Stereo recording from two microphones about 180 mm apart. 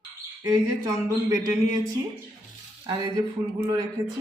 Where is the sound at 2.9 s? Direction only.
20° right (ahead or behind).